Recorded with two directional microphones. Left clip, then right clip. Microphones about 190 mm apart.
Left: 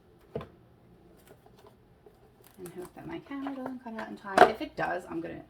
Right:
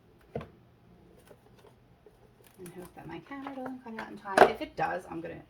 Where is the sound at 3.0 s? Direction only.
40° left (ahead or behind).